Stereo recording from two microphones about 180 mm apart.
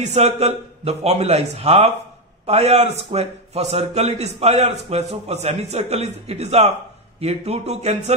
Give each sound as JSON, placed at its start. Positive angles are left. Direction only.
{"t": 0.0, "sound": "a man's voice", "side_deg": -40}